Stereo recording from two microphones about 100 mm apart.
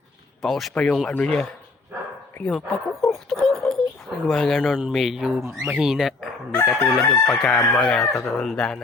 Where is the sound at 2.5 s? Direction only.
5° left (ahead or behind).